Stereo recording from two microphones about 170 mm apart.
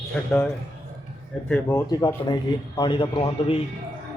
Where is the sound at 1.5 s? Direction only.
10° left (ahead or behind).